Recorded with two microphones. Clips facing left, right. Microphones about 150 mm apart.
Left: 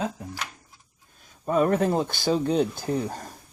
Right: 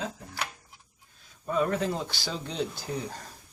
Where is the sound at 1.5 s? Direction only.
50° left (ahead or behind).